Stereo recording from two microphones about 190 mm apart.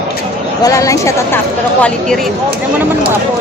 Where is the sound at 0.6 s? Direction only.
15° left (ahead or behind).